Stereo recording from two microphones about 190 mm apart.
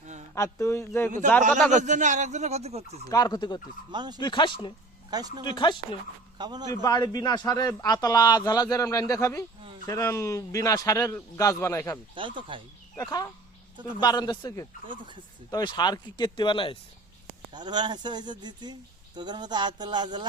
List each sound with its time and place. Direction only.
0.3 s a man's voice: 15° left (ahead or behind)
1.7 s speech: 40° right (ahead or behind)
3.1 s speech: 20° left (ahead or behind)
3.9 s speech: 20° right (ahead or behind)
4.2 s speech: 25° left (ahead or behind)
5.1 s speech: 20° right (ahead or behind)
5.5 s speech: 25° left (ahead or behind)
6.4 s speech: 20° right (ahead or behind)
6.8 s a man's voice: 20° left (ahead or behind)
12.4 s speech: 25° right (ahead or behind)
13.0 s speech: 20° left (ahead or behind)
14.8 s speech: 25° right (ahead or behind)
15.4 s speech: 20° left (ahead or behind)
17.5 s speech: 20° right (ahead or behind)